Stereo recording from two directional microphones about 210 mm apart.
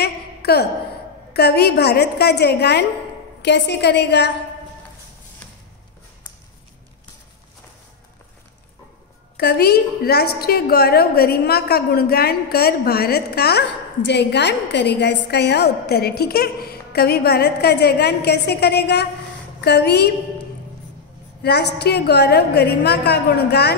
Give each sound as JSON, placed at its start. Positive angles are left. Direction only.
{"t": 0.0, "sound": "a sound", "side_deg": 50}
{"t": 1.3, "sound": "a woman's voice", "side_deg": 50}
{"t": 9.4, "sound": "a woman's voice", "side_deg": 50}
{"t": 21.4, "sound": "a woman's voice", "side_deg": 50}